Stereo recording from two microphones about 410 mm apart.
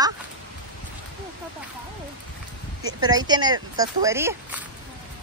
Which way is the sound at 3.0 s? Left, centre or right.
Centre.